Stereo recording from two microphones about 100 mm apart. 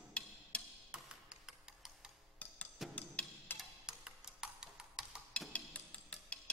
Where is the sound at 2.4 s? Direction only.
15° left (ahead or behind).